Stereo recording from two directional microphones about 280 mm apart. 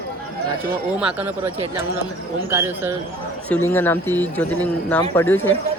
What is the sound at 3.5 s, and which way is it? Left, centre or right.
A man's voice, centre.